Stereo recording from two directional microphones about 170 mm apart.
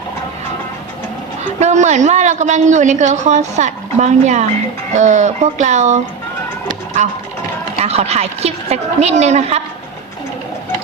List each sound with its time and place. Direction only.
1.5 s a woman's voice: 45° right (ahead or behind)
7.0 s a woman's voice: 45° right (ahead or behind)